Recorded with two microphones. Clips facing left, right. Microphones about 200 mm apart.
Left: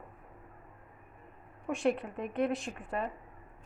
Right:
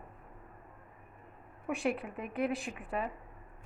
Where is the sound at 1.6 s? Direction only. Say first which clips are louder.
Left 3 dB; 5° right (ahead or behind).